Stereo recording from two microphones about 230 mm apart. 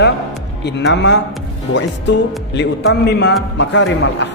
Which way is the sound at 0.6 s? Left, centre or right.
Left.